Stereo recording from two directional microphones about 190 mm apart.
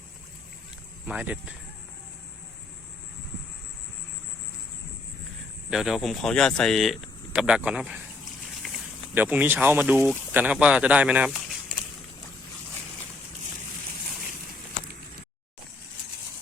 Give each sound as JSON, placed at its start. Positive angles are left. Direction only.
{"t": 1.0, "sound": "speech", "side_deg": -5}
{"t": 5.7, "sound": "speech", "side_deg": 0}